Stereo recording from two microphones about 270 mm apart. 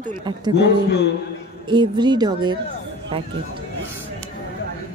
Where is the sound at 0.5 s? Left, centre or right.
Left.